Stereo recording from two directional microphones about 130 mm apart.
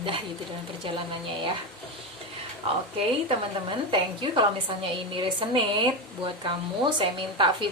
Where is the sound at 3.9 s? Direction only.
40° right (ahead or behind).